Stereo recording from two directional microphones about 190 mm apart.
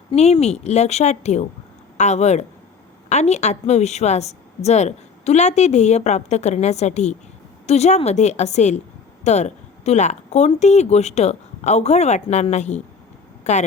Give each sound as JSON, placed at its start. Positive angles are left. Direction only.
{"t": 0.1, "sound": "a woman's voice", "side_deg": 35}